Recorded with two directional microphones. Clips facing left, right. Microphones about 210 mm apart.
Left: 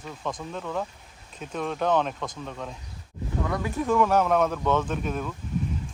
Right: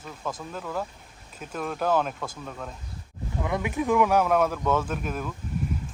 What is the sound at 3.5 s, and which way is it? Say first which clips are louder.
Speech: right 1 dB; 15° right (ahead or behind).